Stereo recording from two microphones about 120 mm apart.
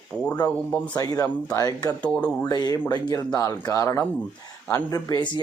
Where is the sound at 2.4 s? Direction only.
35° left (ahead or behind).